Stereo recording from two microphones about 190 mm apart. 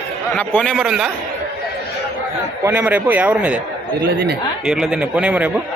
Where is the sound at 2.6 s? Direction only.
10° right (ahead or behind).